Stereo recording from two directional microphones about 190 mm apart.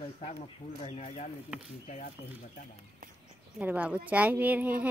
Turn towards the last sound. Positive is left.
turn(degrees=-10)  # may be behind; listen again after turning